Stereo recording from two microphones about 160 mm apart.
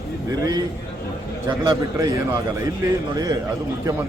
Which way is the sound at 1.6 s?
20° right (ahead or behind).